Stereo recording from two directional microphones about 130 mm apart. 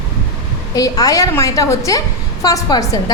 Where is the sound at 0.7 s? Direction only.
30° left (ahead or behind).